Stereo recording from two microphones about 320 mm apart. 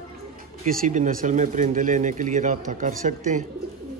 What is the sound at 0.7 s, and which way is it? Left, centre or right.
Speech, right.